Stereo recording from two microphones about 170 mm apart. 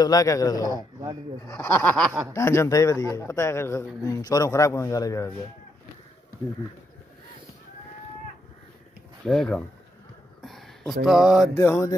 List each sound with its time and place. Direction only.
0.0 s a man's voice: 20° left (ahead or behind); by 2.1 s 5° left (ahead or behind)
2.3 s a man's voice: 15° left (ahead or behind)
9.2 s speech: 5° left (ahead or behind)
10.4 s a sound: centre (ahead or behind)
11.1 s speech: centre (ahead or behind)
11.5 s a man's voice: 15° left (ahead or behind)